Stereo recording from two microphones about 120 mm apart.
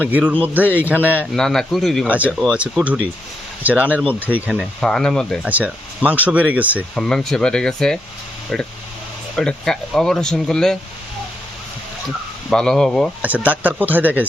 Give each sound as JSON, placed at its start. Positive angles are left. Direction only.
{"t": 0.0, "sound": "speech", "side_deg": -15}
{"t": 1.3, "sound": "speech", "side_deg": 5}
{"t": 2.0, "sound": "speech", "side_deg": -10}
{"t": 4.5, "sound": "speech", "side_deg": 5}
{"t": 5.5, "sound": "speech", "side_deg": -10}
{"t": 6.9, "sound": "speech", "side_deg": 5}
{"t": 12.5, "sound": "speech", "side_deg": 5}
{"t": 13.2, "sound": "speech", "side_deg": -15}